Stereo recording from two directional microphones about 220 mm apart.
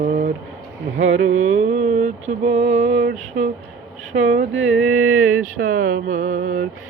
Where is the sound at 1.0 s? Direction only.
65° right (ahead or behind).